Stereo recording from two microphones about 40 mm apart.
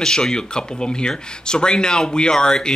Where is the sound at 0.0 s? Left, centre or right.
Centre.